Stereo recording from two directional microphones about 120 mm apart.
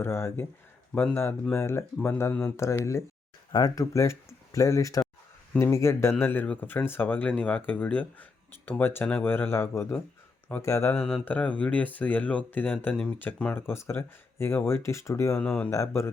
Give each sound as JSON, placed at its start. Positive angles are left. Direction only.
{"t": 0.0, "sound": "speech", "side_deg": 20}
{"t": 10.9, "sound": "speech", "side_deg": 5}
{"t": 15.4, "sound": "speech", "side_deg": 10}
{"t": 15.7, "sound": "speech", "side_deg": 25}